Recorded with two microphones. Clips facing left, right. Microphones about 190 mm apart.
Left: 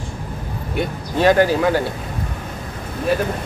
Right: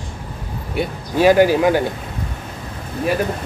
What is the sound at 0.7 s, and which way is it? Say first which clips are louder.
Speech: right 2 dB; 10° right (ahead or behind).